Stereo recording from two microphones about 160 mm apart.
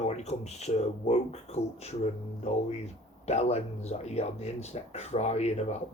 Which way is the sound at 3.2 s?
40° left (ahead or behind).